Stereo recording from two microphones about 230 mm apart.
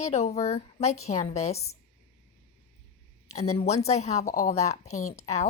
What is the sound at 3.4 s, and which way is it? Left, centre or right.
A woman's voice, left.